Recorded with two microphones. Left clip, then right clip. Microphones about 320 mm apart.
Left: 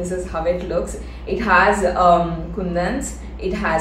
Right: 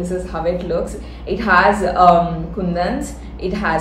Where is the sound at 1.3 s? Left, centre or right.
Centre.